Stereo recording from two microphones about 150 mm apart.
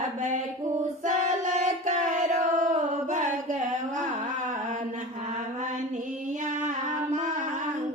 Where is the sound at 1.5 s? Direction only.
50° right (ahead or behind).